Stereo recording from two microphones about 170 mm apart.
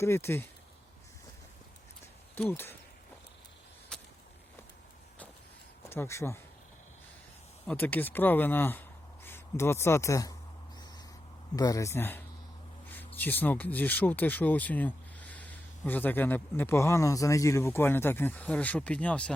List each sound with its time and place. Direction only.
0.0 s speech: 15° left (ahead or behind)
2.3 s speech: 10° left (ahead or behind)
3.9 s a sound: 5° left (ahead or behind)
5.9 s speech: 15° left (ahead or behind)
7.7 s speech: 10° left (ahead or behind)
11.5 s speech: 20° left (ahead or behind)